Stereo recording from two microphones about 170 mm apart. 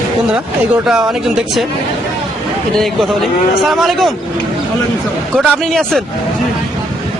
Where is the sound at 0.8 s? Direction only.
5° right (ahead or behind).